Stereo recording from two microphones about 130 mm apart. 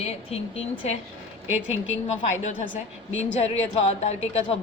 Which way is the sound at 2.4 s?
65° left (ahead or behind).